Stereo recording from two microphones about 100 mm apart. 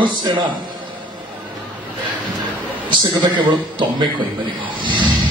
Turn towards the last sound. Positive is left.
turn(degrees=-55)  # may be behind; listen again after turning